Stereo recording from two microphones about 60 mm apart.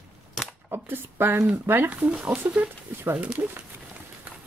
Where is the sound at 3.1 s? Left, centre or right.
Right.